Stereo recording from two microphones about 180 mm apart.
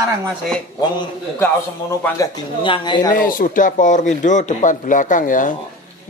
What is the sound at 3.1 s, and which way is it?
Speech, 50° left (ahead or behind).